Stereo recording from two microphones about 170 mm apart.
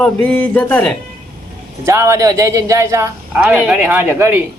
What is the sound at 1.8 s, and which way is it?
Speech, 15° right (ahead or behind).